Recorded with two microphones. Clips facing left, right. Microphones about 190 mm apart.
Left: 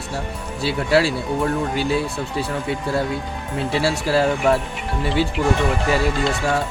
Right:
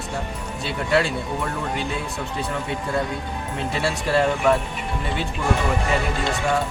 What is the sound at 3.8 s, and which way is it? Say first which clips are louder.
Speech: left 2 dB; 30° left (ahead or behind).